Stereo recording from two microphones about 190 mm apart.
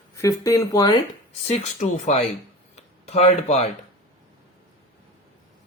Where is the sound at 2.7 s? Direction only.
35° left (ahead or behind).